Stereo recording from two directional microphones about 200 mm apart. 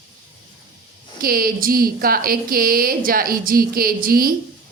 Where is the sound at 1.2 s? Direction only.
45° right (ahead or behind).